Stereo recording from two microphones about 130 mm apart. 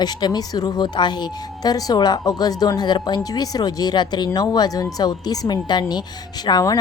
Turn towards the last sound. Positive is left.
turn(degrees=30)  # may be behind; listen again after turning